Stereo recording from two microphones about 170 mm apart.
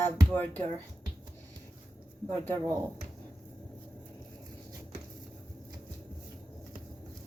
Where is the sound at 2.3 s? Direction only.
10° left (ahead or behind).